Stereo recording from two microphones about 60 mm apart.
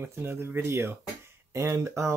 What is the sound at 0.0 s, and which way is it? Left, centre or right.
Speech, right.